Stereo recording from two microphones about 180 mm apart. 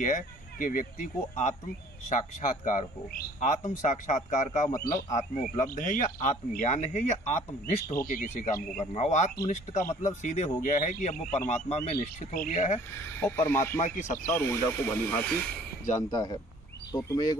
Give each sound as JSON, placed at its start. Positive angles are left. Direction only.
{"t": 0.0, "sound": "a man's voice", "side_deg": 45}
{"t": 8.9, "sound": "speech", "side_deg": 40}
{"t": 13.2, "sound": "speech", "side_deg": 15}
{"t": 13.7, "sound": "speech", "side_deg": 40}
{"t": 14.3, "sound": "speech", "side_deg": 15}
{"t": 16.0, "sound": "speech", "side_deg": 20}